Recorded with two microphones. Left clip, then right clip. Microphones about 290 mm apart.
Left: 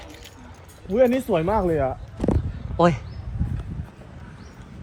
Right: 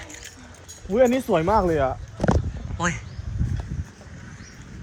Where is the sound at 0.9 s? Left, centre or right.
Right.